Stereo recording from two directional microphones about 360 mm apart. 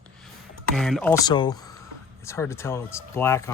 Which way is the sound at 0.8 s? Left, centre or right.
Centre.